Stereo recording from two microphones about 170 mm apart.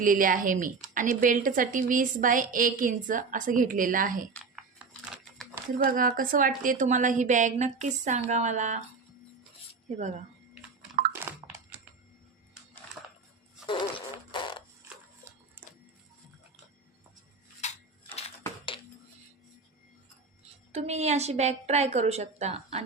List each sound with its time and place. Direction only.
0.0 s a woman's voice: 55° right (ahead or behind)
5.8 s a woman's voice: 55° right (ahead or behind)
9.9 s speech: 40° right (ahead or behind)
11.3 s a sound: 15° right (ahead or behind)
13.7 s fart: 30° left (ahead or behind)
17.6 s crushing: 40° left (ahead or behind)
20.7 s a woman's voice: 40° right (ahead or behind)